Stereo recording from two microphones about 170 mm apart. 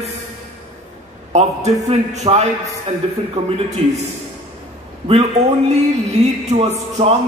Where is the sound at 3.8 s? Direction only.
35° right (ahead or behind).